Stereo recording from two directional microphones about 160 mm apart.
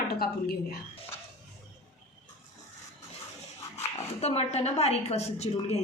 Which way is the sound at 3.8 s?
40° left (ahead or behind).